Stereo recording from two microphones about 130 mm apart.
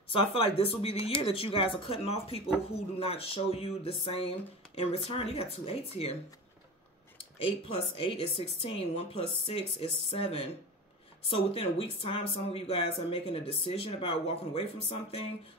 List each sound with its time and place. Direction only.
0.1 s speech: 45° left (ahead or behind)
7.3 s speech: 45° left (ahead or behind)